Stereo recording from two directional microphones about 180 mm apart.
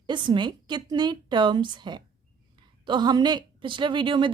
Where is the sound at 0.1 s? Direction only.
25° right (ahead or behind).